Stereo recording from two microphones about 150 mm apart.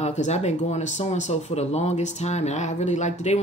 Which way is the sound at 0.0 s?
50° left (ahead or behind).